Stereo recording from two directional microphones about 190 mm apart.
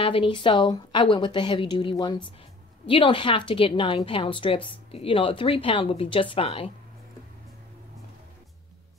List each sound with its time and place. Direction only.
0.0 s a woman's voice: 25° left (ahead or behind)